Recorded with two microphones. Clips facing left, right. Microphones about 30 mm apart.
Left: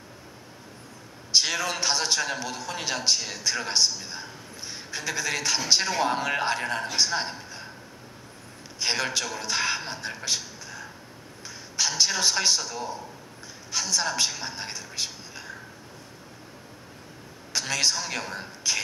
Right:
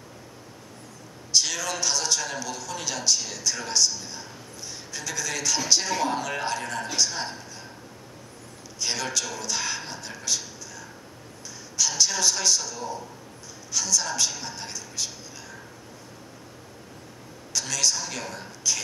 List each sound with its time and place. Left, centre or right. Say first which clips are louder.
1.3 s a man's voice: left 1 dB; left
8.7 s a man's voice: left 2 dB; left
17.5 s a man's voice: left 1 dB; left